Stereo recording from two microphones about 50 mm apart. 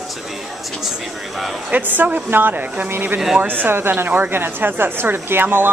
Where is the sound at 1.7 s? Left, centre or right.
Right.